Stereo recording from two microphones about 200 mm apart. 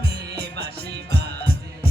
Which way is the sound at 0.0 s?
55° right (ahead or behind).